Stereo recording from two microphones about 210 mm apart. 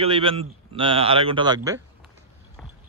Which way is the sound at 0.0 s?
25° right (ahead or behind).